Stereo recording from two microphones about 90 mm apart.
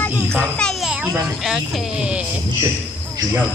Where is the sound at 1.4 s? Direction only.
5° right (ahead or behind).